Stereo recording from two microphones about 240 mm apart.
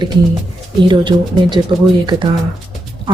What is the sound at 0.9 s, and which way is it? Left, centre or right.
Speech, centre.